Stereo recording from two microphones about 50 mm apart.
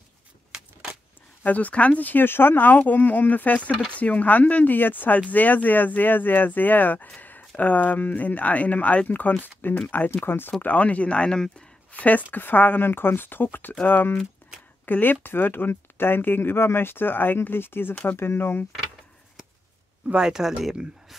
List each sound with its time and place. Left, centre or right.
0.5 s a sound: centre
1.4 s speech: left
10.1 s speech: left
10.6 s speech: left
11.9 s speech: left
20.2 s speech: centre